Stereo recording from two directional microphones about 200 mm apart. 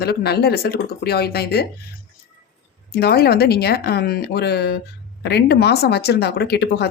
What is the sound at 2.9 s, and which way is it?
Speech, 50° left (ahead or behind).